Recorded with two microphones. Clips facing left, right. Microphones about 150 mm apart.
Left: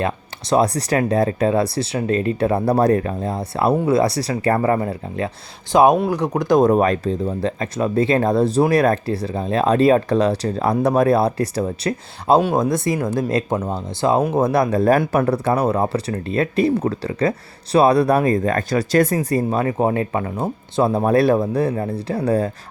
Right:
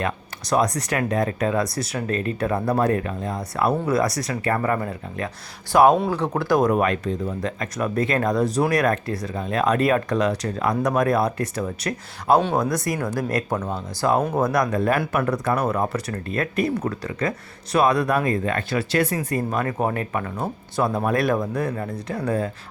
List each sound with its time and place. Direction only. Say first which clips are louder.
0.5 s speech: left 4 dB; 30° left (ahead or behind); by 6.6 s 15° left (ahead or behind)
6.6 s speech: left 7 dB; 30° left (ahead or behind)
14.2 s speech: left 4 dB; 10° left (ahead or behind)
14.4 s speech: left 5 dB; 30° left (ahead or behind)
19.1 s speech: left 5 dB; 35° left (ahead or behind)